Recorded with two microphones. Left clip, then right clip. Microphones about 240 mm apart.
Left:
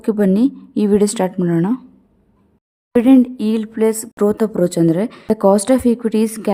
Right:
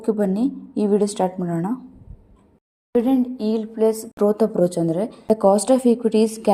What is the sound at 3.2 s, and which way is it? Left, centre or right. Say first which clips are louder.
A woman's voice: left 3 dB; left.